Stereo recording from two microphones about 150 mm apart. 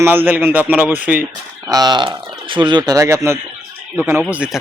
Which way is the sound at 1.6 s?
25° right (ahead or behind).